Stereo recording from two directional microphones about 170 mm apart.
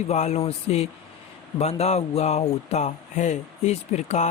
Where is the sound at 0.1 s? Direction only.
40° left (ahead or behind).